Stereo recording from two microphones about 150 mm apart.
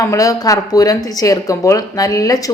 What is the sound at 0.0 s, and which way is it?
Speech, 20° left (ahead or behind).